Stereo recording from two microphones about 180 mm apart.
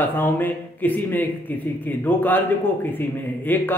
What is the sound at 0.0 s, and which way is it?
A man's voice, 10° left (ahead or behind).